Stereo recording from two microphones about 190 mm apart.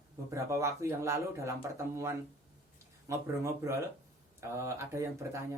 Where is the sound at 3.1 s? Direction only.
15° right (ahead or behind).